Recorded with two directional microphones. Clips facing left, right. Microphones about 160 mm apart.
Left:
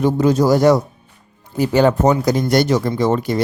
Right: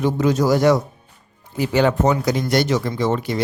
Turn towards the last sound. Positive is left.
turn(degrees=45)  # may be behind; listen again after turning